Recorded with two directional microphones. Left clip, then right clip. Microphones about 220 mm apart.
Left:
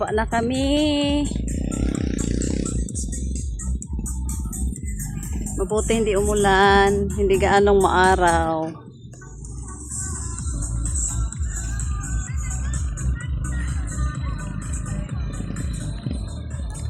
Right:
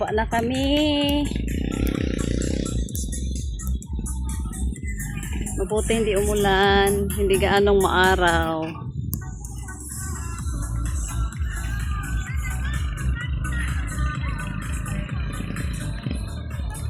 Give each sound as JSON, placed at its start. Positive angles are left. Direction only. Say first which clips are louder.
{"t": 0.0, "sound": "speech", "louder": "left 1 dB", "side_deg": 5}
{"t": 1.3, "sound": "music", "louder": "even", "side_deg": 50}
{"t": 4.3, "sound": "music", "louder": "left 1 dB", "side_deg": 50}
{"t": 5.5, "sound": "music", "louder": "left 1 dB", "side_deg": 10}
{"t": 13.0, "sound": "music", "louder": "right 3 dB", "side_deg": 15}
{"t": 13.5, "sound": "music", "louder": "right 4 dB", "side_deg": 0}